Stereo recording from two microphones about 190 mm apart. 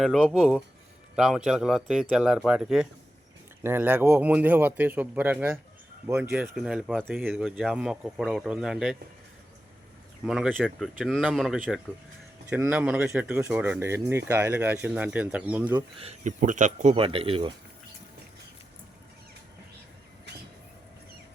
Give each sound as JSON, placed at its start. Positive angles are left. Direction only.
{"t": 0.0, "sound": "speech", "side_deg": 0}
{"t": 10.2, "sound": "speech", "side_deg": -5}
{"t": 16.0, "sound": "speech", "side_deg": -35}